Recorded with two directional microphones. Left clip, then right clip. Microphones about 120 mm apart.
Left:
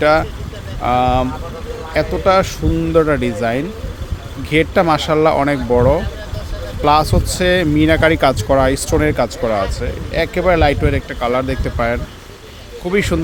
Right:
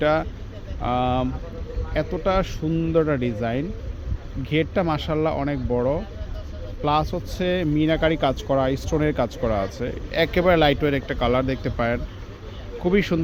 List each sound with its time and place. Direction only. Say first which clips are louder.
0.0 s speech: left 8 dB; 30° left (ahead or behind); by 9.0 s 55° left (ahead or behind)
9.0 s speech: left 7 dB; 35° left (ahead or behind)